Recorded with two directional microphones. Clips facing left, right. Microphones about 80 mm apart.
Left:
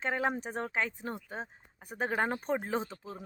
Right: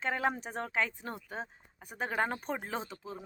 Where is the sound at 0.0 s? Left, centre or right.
Left.